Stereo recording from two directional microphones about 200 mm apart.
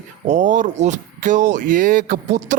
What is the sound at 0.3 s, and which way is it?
A man's voice, 35° right (ahead or behind).